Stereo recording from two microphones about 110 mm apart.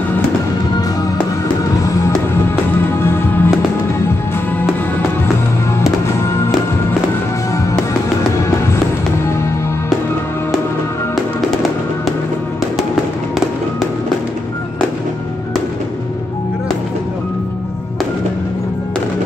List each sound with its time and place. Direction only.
3.0 s music: 20° left (ahead or behind)
5.8 s fireworks: 25° left (ahead or behind)